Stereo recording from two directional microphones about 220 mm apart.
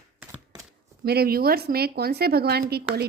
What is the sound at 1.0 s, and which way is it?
A woman's voice, 45° right (ahead or behind).